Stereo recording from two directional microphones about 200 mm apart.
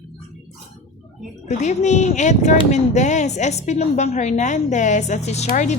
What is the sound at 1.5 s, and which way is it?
A woman's voice, 35° left (ahead or behind).